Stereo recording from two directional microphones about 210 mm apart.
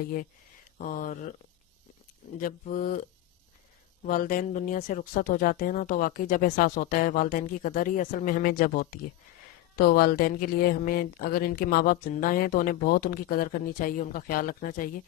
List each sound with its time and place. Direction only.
0.0 s speech: 40° left (ahead or behind)
2.3 s speech: 40° left (ahead or behind)
4.1 s speech: 40° left (ahead or behind)